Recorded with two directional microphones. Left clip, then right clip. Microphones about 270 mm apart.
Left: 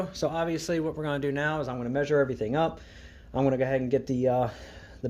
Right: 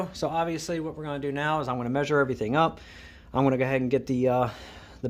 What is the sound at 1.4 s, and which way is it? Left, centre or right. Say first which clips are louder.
Speech: right 3 dB; centre.